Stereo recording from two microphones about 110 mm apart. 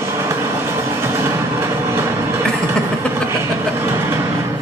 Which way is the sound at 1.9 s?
20° right (ahead or behind).